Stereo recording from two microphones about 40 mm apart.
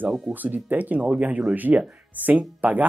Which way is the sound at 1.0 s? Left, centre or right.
Right.